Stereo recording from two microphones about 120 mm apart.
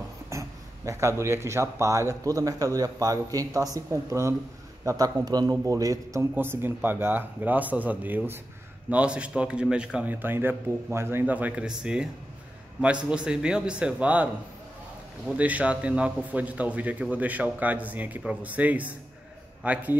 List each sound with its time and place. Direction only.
0.3 s a man's voice: 25° right (ahead or behind)